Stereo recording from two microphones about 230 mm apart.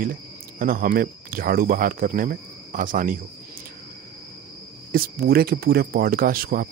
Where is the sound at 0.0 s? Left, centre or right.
Right.